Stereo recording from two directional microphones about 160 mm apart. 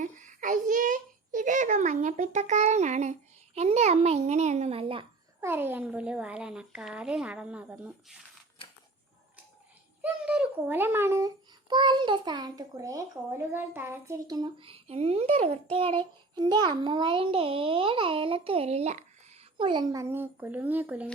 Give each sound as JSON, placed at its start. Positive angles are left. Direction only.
{"t": 0.0, "sound": "a sound", "side_deg": -50}
{"t": 5.4, "sound": "speech", "side_deg": -15}
{"t": 10.0, "sound": "speech", "side_deg": -10}
{"t": 11.7, "sound": "a child's voice", "side_deg": -30}
{"t": 19.5, "sound": "speech", "side_deg": -30}